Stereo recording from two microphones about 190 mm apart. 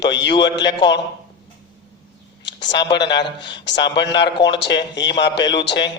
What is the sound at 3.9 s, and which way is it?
A man's voice, 65° left (ahead or behind).